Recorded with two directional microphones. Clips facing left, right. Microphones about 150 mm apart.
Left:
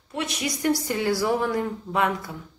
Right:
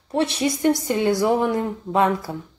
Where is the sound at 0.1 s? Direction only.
30° right (ahead or behind).